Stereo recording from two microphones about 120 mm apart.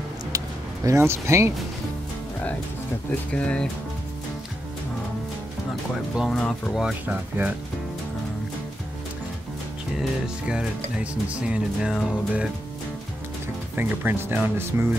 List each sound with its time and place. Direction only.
0.8 s speech: 20° right (ahead or behind)
3.1 s speech: 10° left (ahead or behind)
6.1 s speech: 5° right (ahead or behind)
9.9 s speech: 5° right (ahead or behind)
13.7 s speech: 15° right (ahead or behind)